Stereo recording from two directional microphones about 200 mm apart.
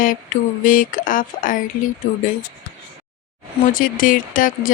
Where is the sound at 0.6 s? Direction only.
40° left (ahead or behind).